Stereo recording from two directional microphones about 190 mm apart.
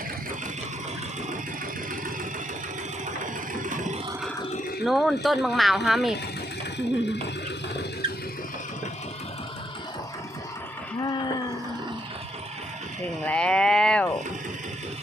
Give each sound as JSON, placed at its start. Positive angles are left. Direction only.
{"t": 3.6, "sound": "vehicle", "side_deg": -40}
{"t": 4.8, "sound": "speech", "side_deg": 0}
{"t": 6.7, "sound": "speech", "side_deg": 65}
{"t": 13.2, "sound": "a sound", "side_deg": 5}